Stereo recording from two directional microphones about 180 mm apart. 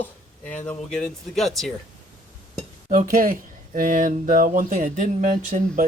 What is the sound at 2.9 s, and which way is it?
Speech, 45° right (ahead or behind).